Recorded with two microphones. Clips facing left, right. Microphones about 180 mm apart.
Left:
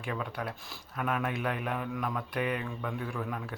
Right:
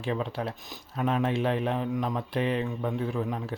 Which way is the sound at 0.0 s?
25° right (ahead or behind).